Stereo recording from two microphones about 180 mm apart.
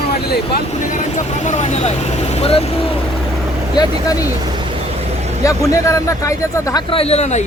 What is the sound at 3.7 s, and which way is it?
Speech, 20° left (ahead or behind).